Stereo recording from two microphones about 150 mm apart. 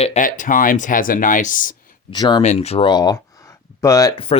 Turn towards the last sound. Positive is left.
turn(degrees=35)  # may be behind; listen again after turning